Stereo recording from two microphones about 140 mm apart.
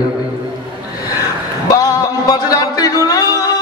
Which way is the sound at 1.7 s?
25° left (ahead or behind).